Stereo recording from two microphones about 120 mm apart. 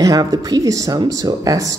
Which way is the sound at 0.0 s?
30° right (ahead or behind).